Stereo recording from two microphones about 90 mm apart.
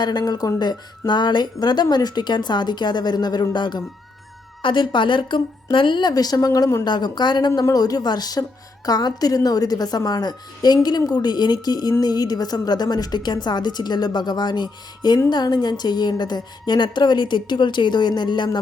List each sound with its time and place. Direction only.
0.0 s a woman's voice: 50° left (ahead or behind)
6.8 s a woman's voice: 55° left (ahead or behind)